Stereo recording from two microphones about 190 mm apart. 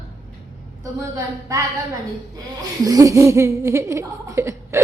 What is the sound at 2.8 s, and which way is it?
Speech, 20° right (ahead or behind).